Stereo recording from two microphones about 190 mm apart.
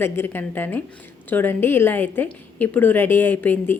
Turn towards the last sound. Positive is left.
turn(degrees=10)  # may be behind; listen again after turning